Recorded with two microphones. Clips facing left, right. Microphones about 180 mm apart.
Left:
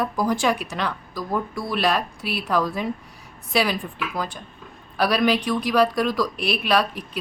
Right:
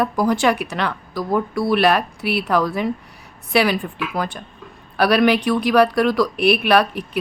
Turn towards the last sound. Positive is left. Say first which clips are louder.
# right 6 dB
turn(degrees=-65)  # may be behind; listen again after turning